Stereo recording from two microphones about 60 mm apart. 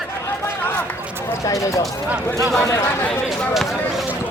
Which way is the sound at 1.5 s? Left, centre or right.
Left.